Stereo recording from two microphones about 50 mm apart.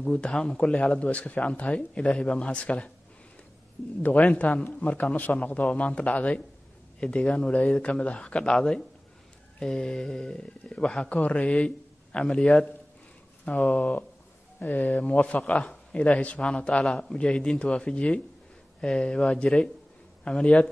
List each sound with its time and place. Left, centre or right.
0.0 s speech: left
4.0 s speech: left
13.5 s speech: left